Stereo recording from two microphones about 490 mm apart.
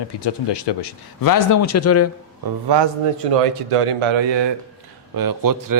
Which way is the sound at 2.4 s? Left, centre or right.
Right.